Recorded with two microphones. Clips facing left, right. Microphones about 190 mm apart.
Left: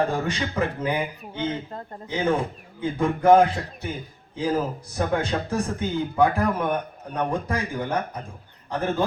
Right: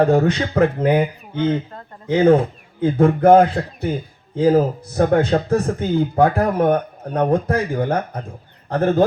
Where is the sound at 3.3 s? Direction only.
60° right (ahead or behind).